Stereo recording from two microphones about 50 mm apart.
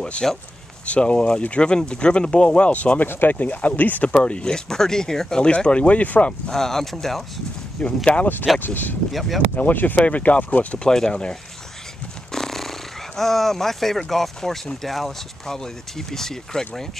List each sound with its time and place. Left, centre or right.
0.0 s speech: centre
3.1 s speech: left
4.1 s speech: left
4.6 s speech: centre
5.4 s speech: left
6.5 s speech: centre
7.8 s speech: left
8.5 s speech: left
9.1 s speech: centre
9.6 s speech: left
10.8 s speech: centre